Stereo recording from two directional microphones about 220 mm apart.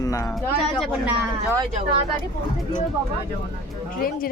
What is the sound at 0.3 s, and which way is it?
Speech, centre (ahead or behind).